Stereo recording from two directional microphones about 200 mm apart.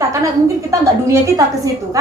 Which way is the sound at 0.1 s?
15° right (ahead or behind).